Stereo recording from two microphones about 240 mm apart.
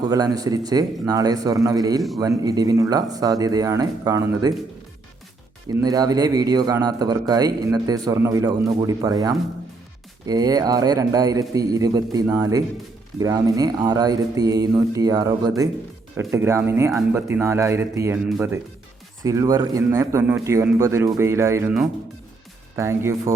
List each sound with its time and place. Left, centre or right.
0.0 s speech: centre
5.6 s speech: centre